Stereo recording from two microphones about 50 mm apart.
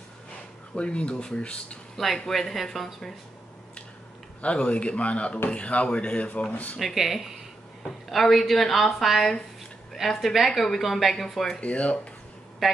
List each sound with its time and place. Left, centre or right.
0.7 s speech: left
2.0 s speech: centre
4.4 s speech: left
6.8 s speech: centre
11.6 s speech: left